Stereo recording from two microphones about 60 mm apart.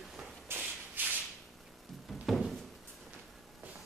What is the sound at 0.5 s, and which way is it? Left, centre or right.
Sanding, right.